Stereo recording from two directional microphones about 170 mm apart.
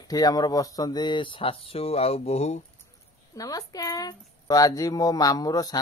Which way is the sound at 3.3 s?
20° left (ahead or behind).